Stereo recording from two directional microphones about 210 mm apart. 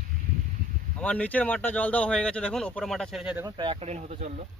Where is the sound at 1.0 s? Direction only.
5° left (ahead or behind).